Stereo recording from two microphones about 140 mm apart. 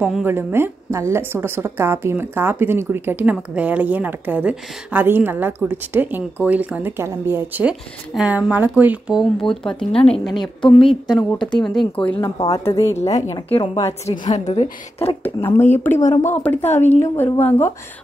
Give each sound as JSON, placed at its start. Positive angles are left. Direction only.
{"t": 0.0, "sound": "speech", "side_deg": -5}
{"t": 0.3, "sound": "a woman's voice", "side_deg": -15}
{"t": 10.6, "sound": "a woman's voice", "side_deg": 40}
{"t": 11.1, "sound": "speech", "side_deg": 5}
{"t": 12.4, "sound": "a woman's voice", "side_deg": 25}
{"t": 14.1, "sound": "a woman's voice", "side_deg": 45}
{"t": 15.2, "sound": "speech", "side_deg": 15}